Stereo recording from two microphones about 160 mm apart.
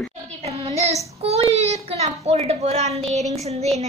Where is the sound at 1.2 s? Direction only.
40° right (ahead or behind).